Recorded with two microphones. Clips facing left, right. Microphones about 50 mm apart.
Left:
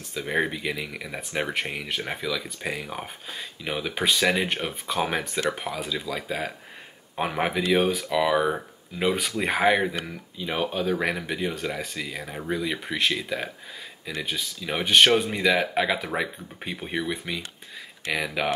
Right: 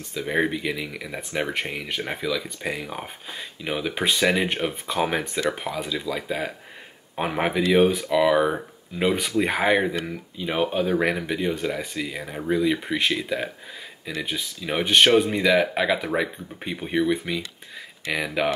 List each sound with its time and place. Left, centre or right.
0.1 s speech: centre